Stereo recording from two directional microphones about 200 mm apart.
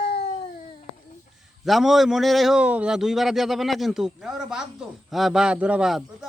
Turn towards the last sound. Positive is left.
turn(degrees=0)  # may be behind; listen again after turning